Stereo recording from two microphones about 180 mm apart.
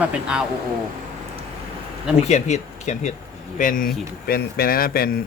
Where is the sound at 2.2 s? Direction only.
40° left (ahead or behind).